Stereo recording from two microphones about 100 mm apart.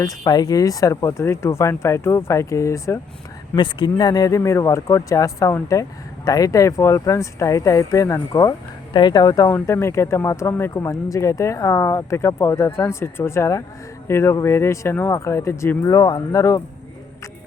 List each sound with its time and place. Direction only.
0.0 s speech: 40° left (ahead or behind)
3.5 s speech: 50° left (ahead or behind); by 8.5 s 35° left (ahead or behind)
8.9 s speech: 50° left (ahead or behind)
9.5 s speech: 25° left (ahead or behind)